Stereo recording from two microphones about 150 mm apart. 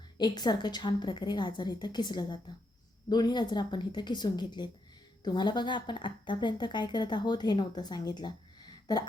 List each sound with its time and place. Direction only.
0.2 s speech: 30° left (ahead or behind)